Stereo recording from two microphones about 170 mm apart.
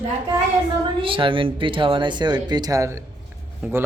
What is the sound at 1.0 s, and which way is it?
Speech, 30° right (ahead or behind).